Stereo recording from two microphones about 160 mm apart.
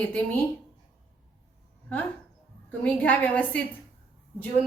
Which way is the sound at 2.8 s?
10° left (ahead or behind).